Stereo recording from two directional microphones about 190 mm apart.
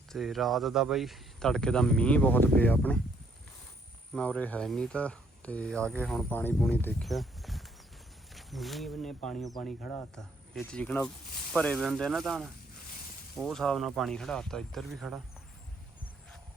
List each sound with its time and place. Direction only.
0.1 s speech: centre (ahead or behind)
4.1 s speech: 5° left (ahead or behind)